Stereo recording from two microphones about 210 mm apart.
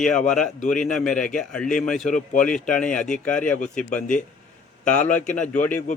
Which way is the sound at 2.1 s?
35° left (ahead or behind).